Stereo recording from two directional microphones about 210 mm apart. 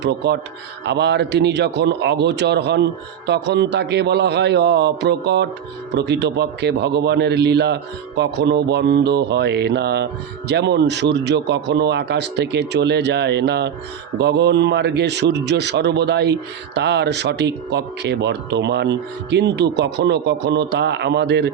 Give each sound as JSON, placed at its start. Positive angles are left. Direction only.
{"t": 0.9, "sound": "a man's voice", "side_deg": -55}